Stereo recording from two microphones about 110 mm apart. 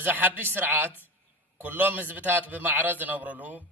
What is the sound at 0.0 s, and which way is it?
A man's voice, 15° right (ahead or behind).